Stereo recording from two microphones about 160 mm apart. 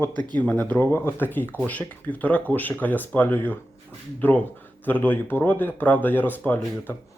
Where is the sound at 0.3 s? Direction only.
10° left (ahead or behind).